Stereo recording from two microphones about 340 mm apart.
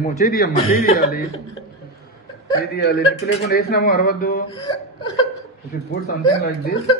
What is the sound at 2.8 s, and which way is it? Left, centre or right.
Speech, left.